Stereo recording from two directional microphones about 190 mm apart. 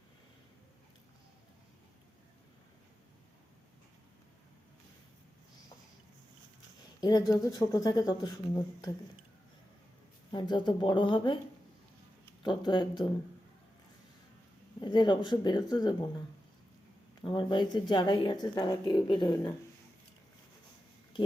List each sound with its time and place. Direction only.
7.0 s speech: 20° left (ahead or behind)
10.3 s speech: 25° left (ahead or behind)
12.4 s speech: 25° left (ahead or behind)
14.8 s speech: 25° left (ahead or behind)
17.2 s speech: 25° left (ahead or behind)